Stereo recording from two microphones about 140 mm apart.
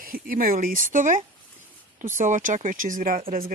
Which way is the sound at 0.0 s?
90° right.